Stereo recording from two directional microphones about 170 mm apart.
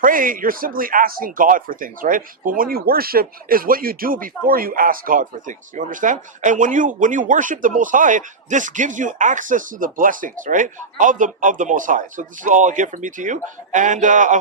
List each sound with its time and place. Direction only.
0.0 s speech: 55° right (ahead or behind)